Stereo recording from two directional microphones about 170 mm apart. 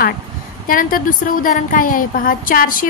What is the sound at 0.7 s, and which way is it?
A woman's voice, 55° left (ahead or behind).